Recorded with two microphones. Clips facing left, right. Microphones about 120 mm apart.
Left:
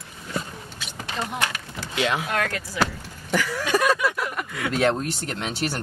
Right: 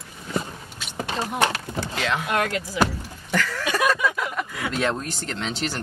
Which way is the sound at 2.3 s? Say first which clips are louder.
Right 2 dB; 20° right (ahead or behind).